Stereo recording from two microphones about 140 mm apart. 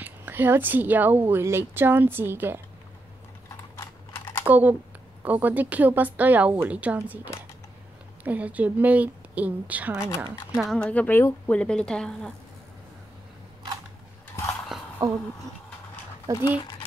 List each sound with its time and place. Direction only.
0.0 s speech: 15° right (ahead or behind)
3.7 s typing: 20° left (ahead or behind)
4.5 s speech: 10° right (ahead or behind)
8.2 s speech: 10° right (ahead or behind)
10.5 s a woman's voice: centre (ahead or behind)
15.0 s speech: 30° right (ahead or behind)
16.4 s speech: 30° left (ahead or behind)